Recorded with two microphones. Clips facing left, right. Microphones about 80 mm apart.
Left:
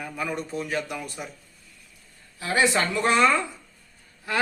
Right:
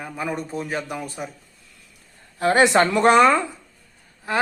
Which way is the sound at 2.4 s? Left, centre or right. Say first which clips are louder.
Right 7 dB; right.